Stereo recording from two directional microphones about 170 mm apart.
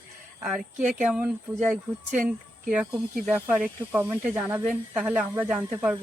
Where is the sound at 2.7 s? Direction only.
5° right (ahead or behind).